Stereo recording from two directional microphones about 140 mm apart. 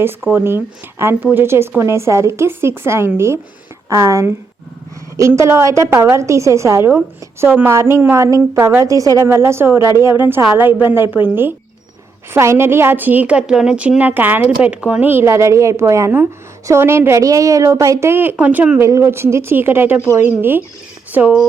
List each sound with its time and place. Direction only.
0.0 s a woman's voice: 15° right (ahead or behind)
12.3 s a woman's voice: 20° right (ahead or behind)
18.8 s a woman's voice: 20° right (ahead or behind)